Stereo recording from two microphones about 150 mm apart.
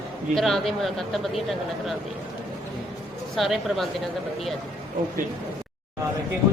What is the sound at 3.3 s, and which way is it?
Speech, centre (ahead or behind).